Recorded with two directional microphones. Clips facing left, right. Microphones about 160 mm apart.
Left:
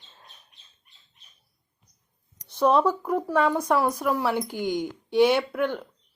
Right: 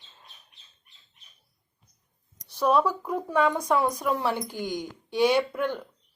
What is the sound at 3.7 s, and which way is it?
A woman's voice, 5° left (ahead or behind).